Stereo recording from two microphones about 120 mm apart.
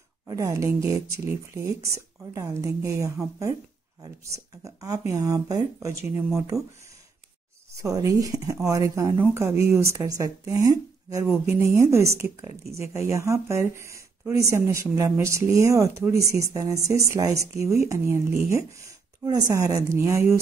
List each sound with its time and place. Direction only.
0.3 s a woman's voice: 25° right (ahead or behind)
4.6 s a woman's voice: 30° right (ahead or behind)
7.7 s a woman's voice: 30° right (ahead or behind)